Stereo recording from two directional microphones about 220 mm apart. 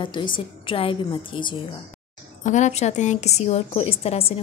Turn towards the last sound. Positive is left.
turn(degrees=25)  # may be behind; listen again after turning